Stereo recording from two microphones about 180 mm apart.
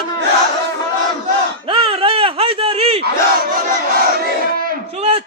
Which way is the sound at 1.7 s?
30° right (ahead or behind).